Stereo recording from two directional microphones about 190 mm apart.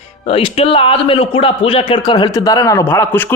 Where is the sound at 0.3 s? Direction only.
30° left (ahead or behind).